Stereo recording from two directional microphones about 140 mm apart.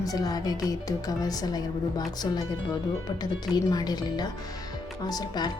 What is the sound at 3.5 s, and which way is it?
Speech, 30° left (ahead or behind).